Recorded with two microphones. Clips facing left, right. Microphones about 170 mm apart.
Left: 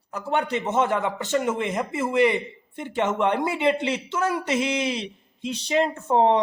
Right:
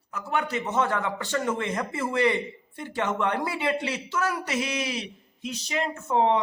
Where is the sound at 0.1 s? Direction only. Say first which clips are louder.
Left 4 dB; 30° left (ahead or behind).